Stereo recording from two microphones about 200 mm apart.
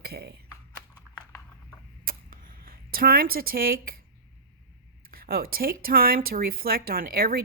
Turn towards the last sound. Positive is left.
turn(degrees=-45)  # may be behind; listen again after turning